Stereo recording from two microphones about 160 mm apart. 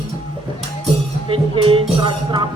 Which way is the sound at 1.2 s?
35° right (ahead or behind).